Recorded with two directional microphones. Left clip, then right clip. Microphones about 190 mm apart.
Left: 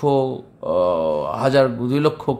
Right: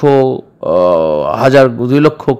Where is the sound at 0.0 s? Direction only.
30° right (ahead or behind).